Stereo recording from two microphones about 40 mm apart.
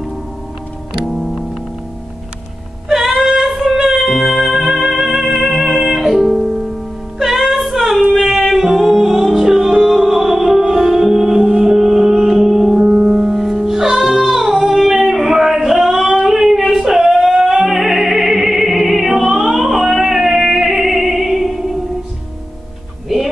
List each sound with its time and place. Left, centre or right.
1.0 s music: centre
3.1 s music: centre
5.7 s music: centre
5.9 s music: centre
7.6 s female singing: centre
8.1 s music: centre
10.8 s music: centre
11.1 s music: centre
11.4 s music: centre
16.3 s a sound: centre
16.6 s opera: centre
20.8 s music: centre